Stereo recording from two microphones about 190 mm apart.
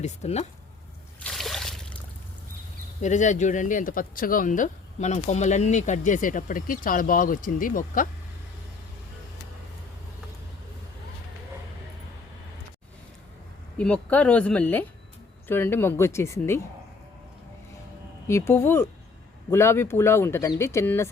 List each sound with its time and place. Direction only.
0.0 s speech: 35° left (ahead or behind)
1.2 s a sound: centre (ahead or behind)
3.0 s speech: 40° left (ahead or behind)
13.7 s speech: 5° left (ahead or behind)
18.3 s speech: 15° left (ahead or behind)